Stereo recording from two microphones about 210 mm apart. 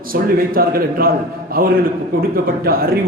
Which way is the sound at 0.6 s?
45° right (ahead or behind).